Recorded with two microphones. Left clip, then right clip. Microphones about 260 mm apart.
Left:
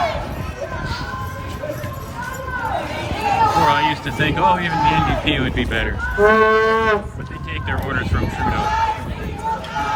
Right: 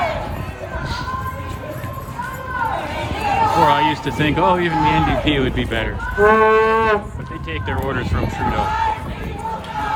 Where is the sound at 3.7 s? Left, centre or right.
Centre.